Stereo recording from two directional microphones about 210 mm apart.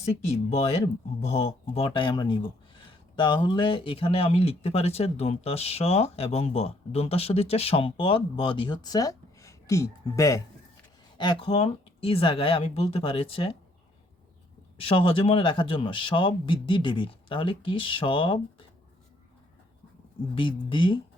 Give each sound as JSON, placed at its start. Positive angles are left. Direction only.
{"t": 0.5, "sound": "speech", "side_deg": 30}
{"t": 14.8, "sound": "speech", "side_deg": 25}
{"t": 20.3, "sound": "speech", "side_deg": 25}